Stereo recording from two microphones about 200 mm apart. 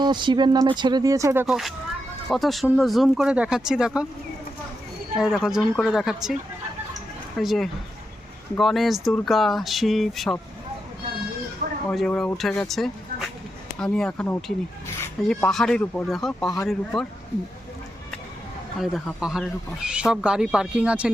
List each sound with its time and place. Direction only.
0.0 s speech: 20° right (ahead or behind); by 4.0 s 5° right (ahead or behind)
5.1 s speech: 5° right (ahead or behind)
7.3 s speech: centre (ahead or behind)
11.9 s speech: 5° left (ahead or behind)
18.8 s speech: centre (ahead or behind)